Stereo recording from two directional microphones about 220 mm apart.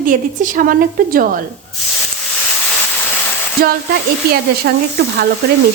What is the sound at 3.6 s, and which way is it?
Speech, 40° right (ahead or behind).